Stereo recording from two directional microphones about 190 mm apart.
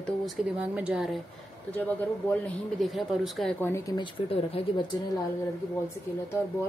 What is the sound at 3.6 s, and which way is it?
Speech, 15° left (ahead or behind).